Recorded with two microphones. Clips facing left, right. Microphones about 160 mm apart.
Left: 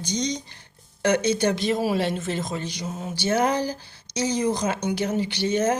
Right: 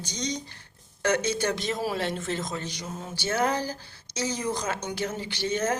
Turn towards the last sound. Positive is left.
turn(degrees=15)  # may be behind; listen again after turning